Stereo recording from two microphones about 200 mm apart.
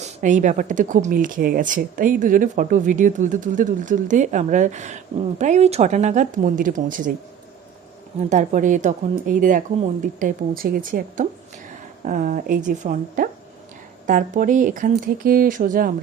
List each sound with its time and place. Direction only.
0.0 s speech: 40° right (ahead or behind)
8.2 s speech: 35° right (ahead or behind)